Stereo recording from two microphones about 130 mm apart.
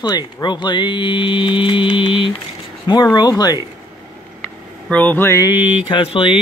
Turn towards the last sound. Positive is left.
turn(degrees=45)  # may be behind; listen again after turning